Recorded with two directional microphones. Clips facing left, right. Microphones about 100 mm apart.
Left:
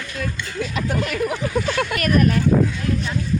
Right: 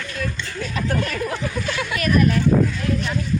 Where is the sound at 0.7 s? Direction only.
10° left (ahead or behind).